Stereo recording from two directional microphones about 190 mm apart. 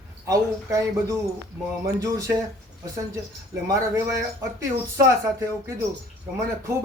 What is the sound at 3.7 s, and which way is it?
Speech, 15° right (ahead or behind).